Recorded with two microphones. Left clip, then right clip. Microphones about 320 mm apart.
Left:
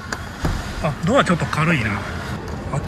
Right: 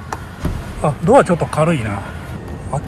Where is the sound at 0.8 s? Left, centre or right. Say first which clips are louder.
Right 7 dB; centre.